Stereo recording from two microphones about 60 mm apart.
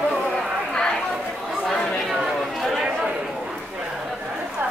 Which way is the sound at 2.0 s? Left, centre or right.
Centre.